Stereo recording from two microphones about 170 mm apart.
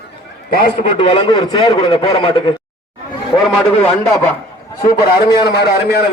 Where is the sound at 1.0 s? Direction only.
30° left (ahead or behind).